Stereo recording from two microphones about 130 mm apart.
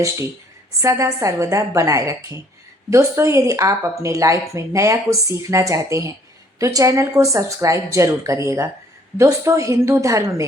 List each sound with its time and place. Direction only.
0.8 s speech: 25° right (ahead or behind)